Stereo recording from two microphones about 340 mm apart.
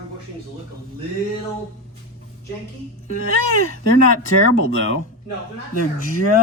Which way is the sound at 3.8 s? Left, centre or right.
Left.